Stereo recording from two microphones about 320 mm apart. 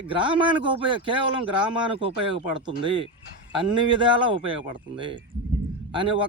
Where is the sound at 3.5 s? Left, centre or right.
Centre.